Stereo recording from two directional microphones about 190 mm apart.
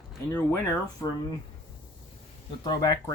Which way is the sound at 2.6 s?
20° left (ahead or behind).